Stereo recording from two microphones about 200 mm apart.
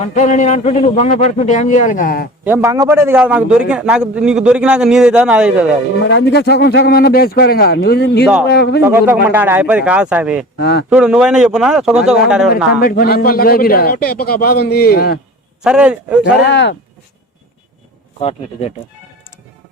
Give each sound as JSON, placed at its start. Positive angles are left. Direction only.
{"t": 0.0, "sound": "a man's voice", "side_deg": 35}
{"t": 2.4, "sound": "a man's voice", "side_deg": -10}
{"t": 6.1, "sound": "a man's voice", "side_deg": 55}
{"t": 8.8, "sound": "speech", "side_deg": -10}
{"t": 10.6, "sound": "speech", "side_deg": 55}
{"t": 10.8, "sound": "a man's voice", "side_deg": -5}
{"t": 12.8, "sound": "a man's voice", "side_deg": 50}
{"t": 15.6, "sound": "a man's voice", "side_deg": -5}
{"t": 16.2, "sound": "speech", "side_deg": 60}
{"t": 18.2, "sound": "speech", "side_deg": 30}